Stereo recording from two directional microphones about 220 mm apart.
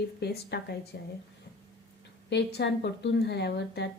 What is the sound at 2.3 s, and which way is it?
Speech, 50° left (ahead or behind).